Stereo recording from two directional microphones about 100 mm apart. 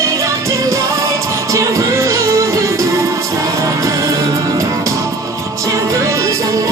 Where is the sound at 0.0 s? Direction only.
30° right (ahead or behind).